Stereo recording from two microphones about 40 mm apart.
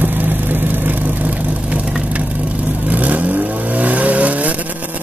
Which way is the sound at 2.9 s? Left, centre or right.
Right.